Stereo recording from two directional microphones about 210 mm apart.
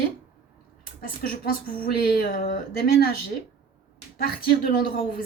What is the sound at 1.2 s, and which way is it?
A woman's voice, 45° left (ahead or behind).